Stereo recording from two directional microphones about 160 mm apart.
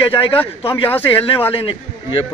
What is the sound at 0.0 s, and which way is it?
Speech, 35° left (ahead or behind).